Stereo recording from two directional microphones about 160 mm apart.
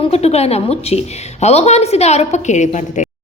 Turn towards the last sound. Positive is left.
turn(degrees=50)  # may be behind; listen again after turning